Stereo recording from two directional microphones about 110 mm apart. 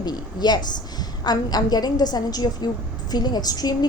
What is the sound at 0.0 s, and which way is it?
Speech, 40° left (ahead or behind).